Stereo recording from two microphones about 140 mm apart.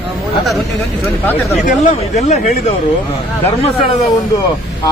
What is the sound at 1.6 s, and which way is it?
Speech, 55° left (ahead or behind).